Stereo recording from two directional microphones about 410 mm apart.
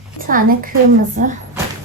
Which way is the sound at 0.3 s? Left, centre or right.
Centre.